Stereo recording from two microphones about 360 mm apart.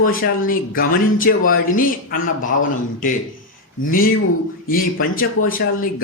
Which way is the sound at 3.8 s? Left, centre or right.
Left.